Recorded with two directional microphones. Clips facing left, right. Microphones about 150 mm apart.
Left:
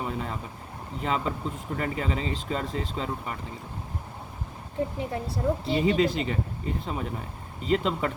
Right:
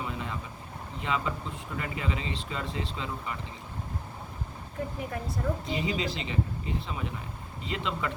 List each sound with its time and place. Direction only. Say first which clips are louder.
0.0 s vehicle: left 4 dB; 40° left (ahead or behind)
1.0 s speech: left 3 dB; 40° left (ahead or behind)
4.9 s speech: left 3 dB; 30° left (ahead or behind)
5.8 s speech: left 8 dB; 50° left (ahead or behind)